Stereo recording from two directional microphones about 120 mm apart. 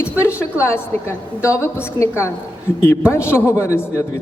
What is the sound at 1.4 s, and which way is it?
A man's voice, 25° left (ahead or behind).